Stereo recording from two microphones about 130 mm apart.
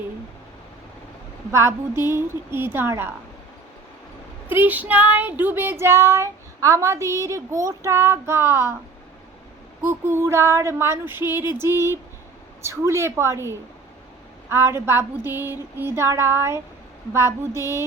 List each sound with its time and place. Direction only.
1.5 s child singing: 20° right (ahead or behind)
2.7 s a woman's voice: 15° right (ahead or behind)
4.4 s child singing: 15° right (ahead or behind)
9.8 s child singing: 20° right (ahead or behind)